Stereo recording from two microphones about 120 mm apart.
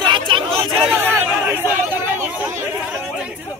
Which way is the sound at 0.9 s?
20° right (ahead or behind).